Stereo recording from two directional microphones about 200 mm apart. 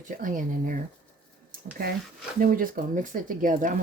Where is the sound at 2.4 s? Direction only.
45° right (ahead or behind).